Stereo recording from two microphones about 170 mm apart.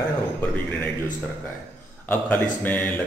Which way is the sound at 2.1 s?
10° left (ahead or behind).